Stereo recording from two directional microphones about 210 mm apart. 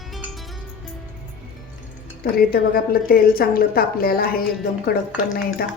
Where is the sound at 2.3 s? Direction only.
45° left (ahead or behind).